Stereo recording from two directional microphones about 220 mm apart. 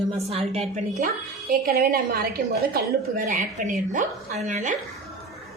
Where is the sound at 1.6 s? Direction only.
45° right (ahead or behind).